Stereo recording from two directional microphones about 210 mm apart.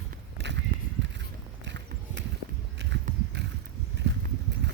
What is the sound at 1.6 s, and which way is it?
Clip-clop, 55° right (ahead or behind).